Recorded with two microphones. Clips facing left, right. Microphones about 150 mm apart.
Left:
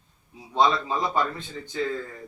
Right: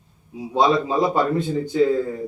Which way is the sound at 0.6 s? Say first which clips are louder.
Right 5 dB; 10° right (ahead or behind).